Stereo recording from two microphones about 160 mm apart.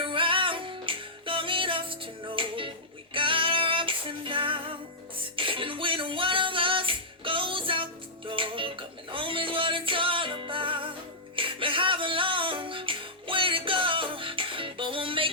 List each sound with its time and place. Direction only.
0.0 s music: 30° right (ahead or behind)